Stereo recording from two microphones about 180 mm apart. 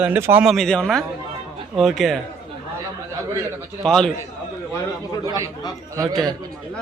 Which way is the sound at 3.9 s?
Centre (ahead or behind).